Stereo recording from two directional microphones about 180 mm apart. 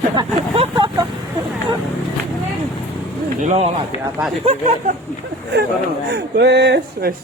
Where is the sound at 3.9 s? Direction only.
35° left (ahead or behind).